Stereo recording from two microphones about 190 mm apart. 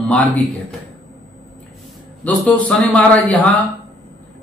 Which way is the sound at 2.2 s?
5° left (ahead or behind).